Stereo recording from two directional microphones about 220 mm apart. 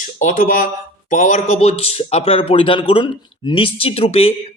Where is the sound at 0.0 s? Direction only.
35° left (ahead or behind).